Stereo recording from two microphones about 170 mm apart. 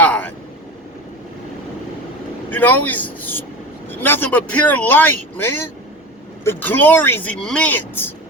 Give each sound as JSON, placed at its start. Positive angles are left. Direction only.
{"t": 0.0, "sound": "vehicle", "side_deg": 10}
{"t": 2.5, "sound": "speech", "side_deg": 10}